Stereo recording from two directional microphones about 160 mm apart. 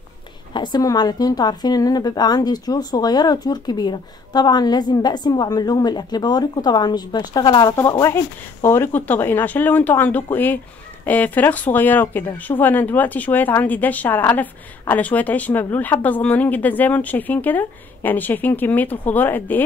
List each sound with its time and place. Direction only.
0.5 s a woman's voice: 25° left (ahead or behind); by 19.6 s 10° left (ahead or behind)